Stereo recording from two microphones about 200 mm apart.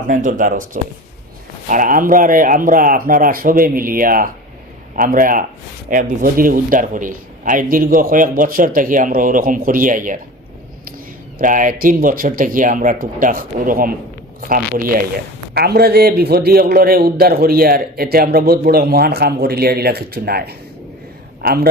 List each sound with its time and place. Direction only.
0.1 s a man's voice: 40° right (ahead or behind)
11.3 s a man's voice: 40° right (ahead or behind)